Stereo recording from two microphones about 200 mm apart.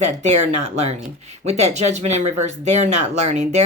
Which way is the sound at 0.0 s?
35° right (ahead or behind).